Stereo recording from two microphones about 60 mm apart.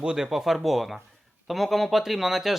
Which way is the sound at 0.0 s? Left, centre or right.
Centre.